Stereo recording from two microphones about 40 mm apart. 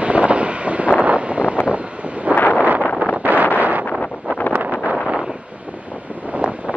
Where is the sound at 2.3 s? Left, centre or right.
Left.